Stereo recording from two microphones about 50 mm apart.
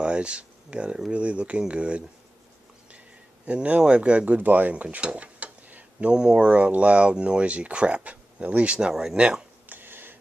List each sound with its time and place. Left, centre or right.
0.0 s speech: right
3.4 s speech: right
4.9 s dishes: right
6.0 s speech: centre
9.7 s a sound: right